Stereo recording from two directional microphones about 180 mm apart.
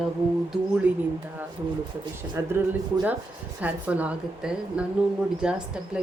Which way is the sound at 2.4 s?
15° right (ahead or behind).